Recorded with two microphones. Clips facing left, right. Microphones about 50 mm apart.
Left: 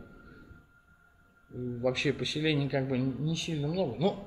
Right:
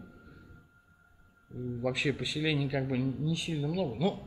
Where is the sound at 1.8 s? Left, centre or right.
Centre.